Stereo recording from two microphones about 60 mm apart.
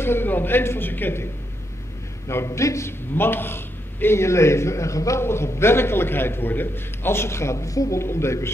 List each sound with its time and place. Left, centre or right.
0.0 s a man's voice: left
2.2 s a man's voice: left
3.2 s a man's voice: left
5.2 s a man's voice: left
8.0 s a man's voice: left